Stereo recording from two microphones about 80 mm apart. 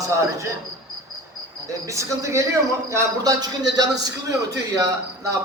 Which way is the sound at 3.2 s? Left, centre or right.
Right.